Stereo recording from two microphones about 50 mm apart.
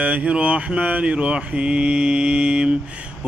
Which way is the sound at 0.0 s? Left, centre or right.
Right.